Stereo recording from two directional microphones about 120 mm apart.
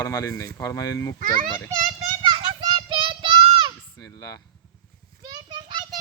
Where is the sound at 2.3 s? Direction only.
40° right (ahead or behind).